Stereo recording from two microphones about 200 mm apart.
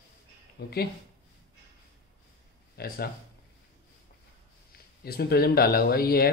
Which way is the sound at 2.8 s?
50° left (ahead or behind).